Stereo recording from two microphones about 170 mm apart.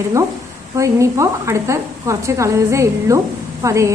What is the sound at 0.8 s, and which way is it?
A woman's voice, 20° right (ahead or behind).